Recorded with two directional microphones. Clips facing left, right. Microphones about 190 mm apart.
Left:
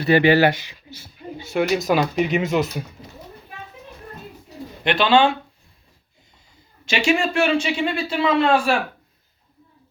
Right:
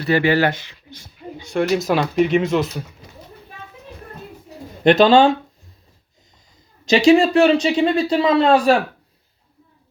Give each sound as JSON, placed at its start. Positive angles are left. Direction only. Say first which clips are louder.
{"t": 0.0, "sound": "speech", "louder": "left 2 dB", "side_deg": 15}
{"t": 4.8, "sound": "speech", "louder": "right 5 dB", "side_deg": -40}
{"t": 6.8, "sound": "speech", "louder": "right 8 dB", "side_deg": -35}